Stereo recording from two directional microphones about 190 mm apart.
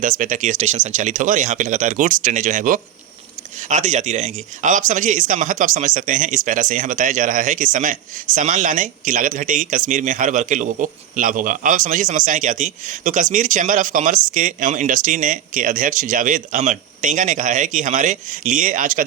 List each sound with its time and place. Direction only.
0.0 s a man's voice: 45° right (ahead or behind)